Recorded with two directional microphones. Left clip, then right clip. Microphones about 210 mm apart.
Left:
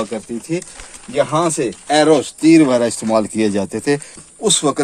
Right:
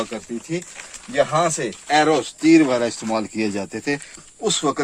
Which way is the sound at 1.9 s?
35° left (ahead or behind).